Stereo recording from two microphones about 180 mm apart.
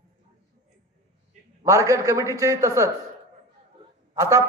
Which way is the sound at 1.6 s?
20° right (ahead or behind).